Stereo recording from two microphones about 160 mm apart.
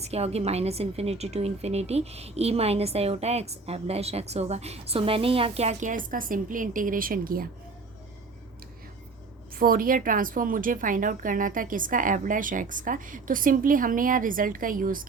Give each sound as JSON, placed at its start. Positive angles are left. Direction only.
{"t": 0.0, "sound": "a woman's voice", "side_deg": -40}
{"t": 9.6, "sound": "a woman's voice", "side_deg": -65}